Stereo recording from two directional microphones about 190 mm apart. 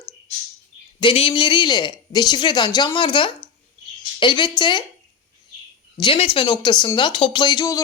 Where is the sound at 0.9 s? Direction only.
30° left (ahead or behind).